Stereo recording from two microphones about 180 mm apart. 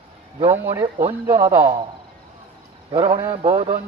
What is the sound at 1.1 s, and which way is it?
Speech, 20° right (ahead or behind).